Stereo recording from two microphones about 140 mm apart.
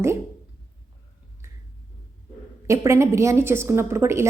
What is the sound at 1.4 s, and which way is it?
Finger snapping, 20° right (ahead or behind).